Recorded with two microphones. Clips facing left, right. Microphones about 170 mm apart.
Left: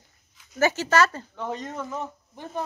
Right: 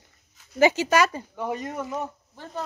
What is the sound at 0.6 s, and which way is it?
Speech, 15° right (ahead or behind).